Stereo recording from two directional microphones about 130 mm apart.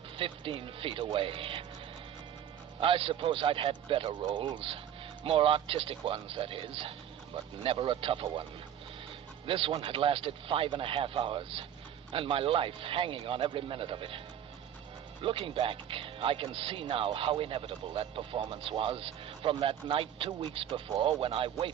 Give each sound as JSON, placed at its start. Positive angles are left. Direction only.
{"t": 0.2, "sound": "speech", "side_deg": -45}
{"t": 2.8, "sound": "speech", "side_deg": -45}
{"t": 9.5, "sound": "speech", "side_deg": -45}
{"t": 15.2, "sound": "speech", "side_deg": -45}